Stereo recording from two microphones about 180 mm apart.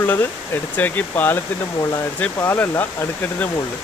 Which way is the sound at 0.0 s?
10° left (ahead or behind).